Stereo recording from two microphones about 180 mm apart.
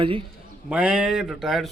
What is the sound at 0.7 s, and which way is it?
Speech, 5° right (ahead or behind).